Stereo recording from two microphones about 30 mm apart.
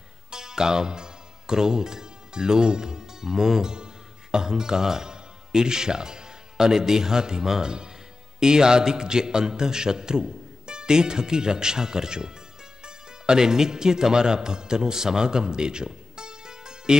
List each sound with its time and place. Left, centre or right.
0.3 s a man's voice: right